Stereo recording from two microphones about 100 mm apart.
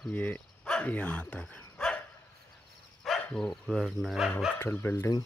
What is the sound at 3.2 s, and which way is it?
Speech, 10° left (ahead or behind).